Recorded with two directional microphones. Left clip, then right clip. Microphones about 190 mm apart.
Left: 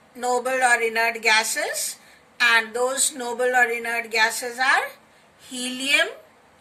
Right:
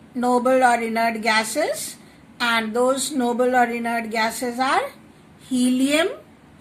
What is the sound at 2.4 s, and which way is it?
Speech, centre (ahead or behind).